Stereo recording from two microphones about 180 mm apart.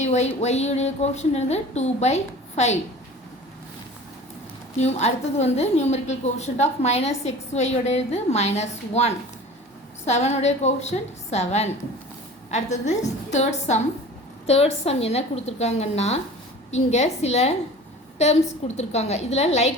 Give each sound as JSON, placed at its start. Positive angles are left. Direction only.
{"t": 0.0, "sound": "a woman's voice", "side_deg": 40}
{"t": 4.8, "sound": "a woman's voice", "side_deg": 40}